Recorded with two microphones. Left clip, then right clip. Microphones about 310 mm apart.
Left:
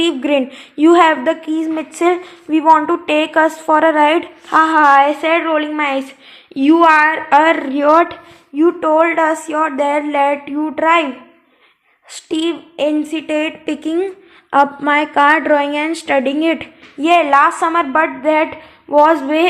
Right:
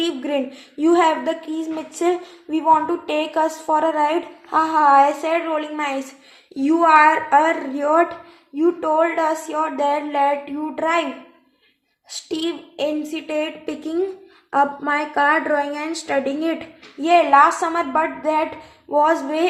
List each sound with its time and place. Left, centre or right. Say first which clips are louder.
0.0 s a woman's voice: left 7 dB; left
12.3 s a woman's voice: left 7 dB; left